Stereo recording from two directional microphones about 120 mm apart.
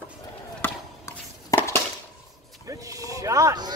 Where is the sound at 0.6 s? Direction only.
20° left (ahead or behind).